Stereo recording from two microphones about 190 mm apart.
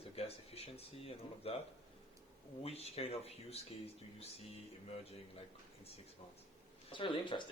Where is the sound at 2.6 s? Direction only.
30° left (ahead or behind).